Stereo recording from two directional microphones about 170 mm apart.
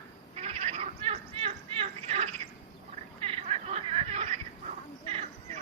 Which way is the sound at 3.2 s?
35° right (ahead or behind).